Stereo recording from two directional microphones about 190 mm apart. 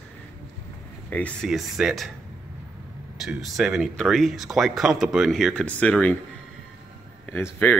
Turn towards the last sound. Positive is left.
turn(degrees=10)  # may be behind; listen again after turning